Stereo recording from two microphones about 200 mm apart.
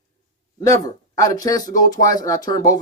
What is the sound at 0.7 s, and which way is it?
Speech, 15° left (ahead or behind).